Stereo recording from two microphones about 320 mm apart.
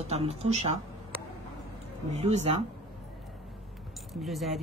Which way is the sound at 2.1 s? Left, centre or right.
Right.